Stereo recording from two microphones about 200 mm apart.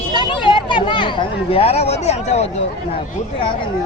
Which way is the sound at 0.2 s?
25° left (ahead or behind).